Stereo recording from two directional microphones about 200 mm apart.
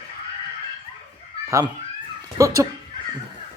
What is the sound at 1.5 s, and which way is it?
Speech, 15° right (ahead or behind).